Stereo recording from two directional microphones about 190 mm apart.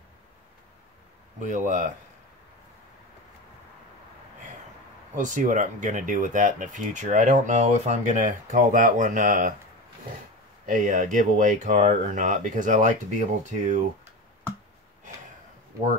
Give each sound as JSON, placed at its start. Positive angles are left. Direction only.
{"t": 1.4, "sound": "speech", "side_deg": -40}
{"t": 5.1, "sound": "speech", "side_deg": -40}
{"t": 10.7, "sound": "speech", "side_deg": -40}